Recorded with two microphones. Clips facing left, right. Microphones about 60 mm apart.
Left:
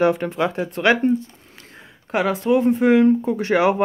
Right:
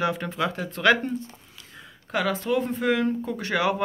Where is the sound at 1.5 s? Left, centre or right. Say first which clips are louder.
Left 3 dB; left.